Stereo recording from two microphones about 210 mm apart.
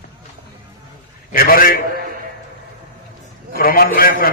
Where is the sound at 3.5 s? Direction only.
45° left (ahead or behind).